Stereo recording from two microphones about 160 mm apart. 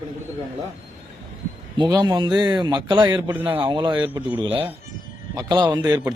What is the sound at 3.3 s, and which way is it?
Speech, 10° right (ahead or behind).